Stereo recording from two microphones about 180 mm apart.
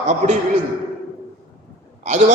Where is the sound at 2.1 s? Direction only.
40° right (ahead or behind).